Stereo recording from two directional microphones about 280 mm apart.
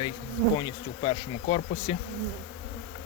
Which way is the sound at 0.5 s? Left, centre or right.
Centre.